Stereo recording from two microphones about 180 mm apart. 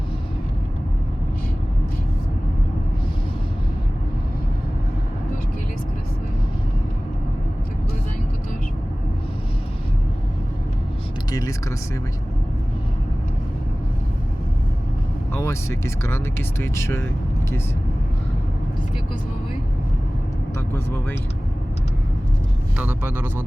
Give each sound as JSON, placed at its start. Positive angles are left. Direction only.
{"t": 11.3, "sound": "vehicle", "side_deg": 20}
{"t": 15.3, "sound": "speech", "side_deg": 15}
{"t": 20.7, "sound": "speech", "side_deg": 10}
{"t": 22.8, "sound": "speech", "side_deg": -10}